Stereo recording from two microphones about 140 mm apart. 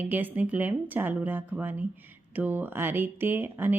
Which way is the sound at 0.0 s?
15° right (ahead or behind).